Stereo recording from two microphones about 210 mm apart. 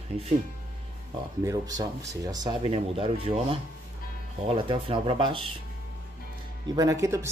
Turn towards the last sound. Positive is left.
turn(degrees=-15)  # may be behind; listen again after turning